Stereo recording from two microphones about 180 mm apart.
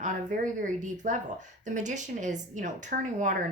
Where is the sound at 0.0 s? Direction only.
45° right (ahead or behind).